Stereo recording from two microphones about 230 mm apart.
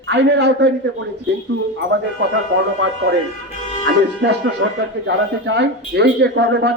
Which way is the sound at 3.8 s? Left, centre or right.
Right.